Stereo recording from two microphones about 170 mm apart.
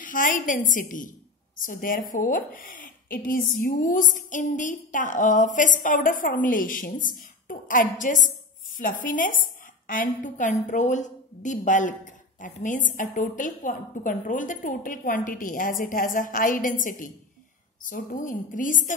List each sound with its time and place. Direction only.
0.0 s a woman's voice: 50° left (ahead or behind)